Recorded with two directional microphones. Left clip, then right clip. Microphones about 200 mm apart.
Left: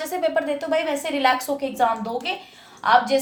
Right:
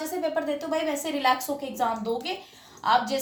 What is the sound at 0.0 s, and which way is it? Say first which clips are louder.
A woman's voice: left 5 dB; 45° left (ahead or behind).